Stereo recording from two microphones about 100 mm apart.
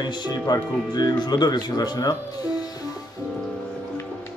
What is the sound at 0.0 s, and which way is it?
Speech, 40° left (ahead or behind).